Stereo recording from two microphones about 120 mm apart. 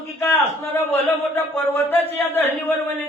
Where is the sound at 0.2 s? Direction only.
20° left (ahead or behind).